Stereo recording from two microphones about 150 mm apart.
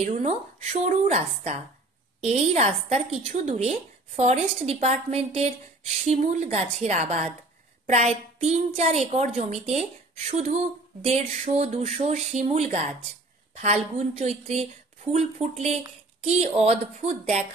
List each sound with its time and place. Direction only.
0.0 s a woman's voice: 50° right (ahead or behind)